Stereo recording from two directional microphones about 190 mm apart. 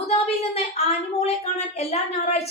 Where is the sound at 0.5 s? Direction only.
35° left (ahead or behind).